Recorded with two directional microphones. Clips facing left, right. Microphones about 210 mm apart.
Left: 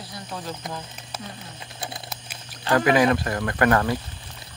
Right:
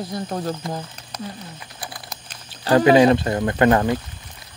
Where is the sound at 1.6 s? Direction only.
25° left (ahead or behind).